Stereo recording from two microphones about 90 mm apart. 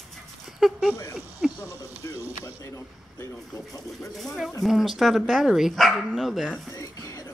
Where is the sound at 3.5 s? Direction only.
40° left (ahead or behind).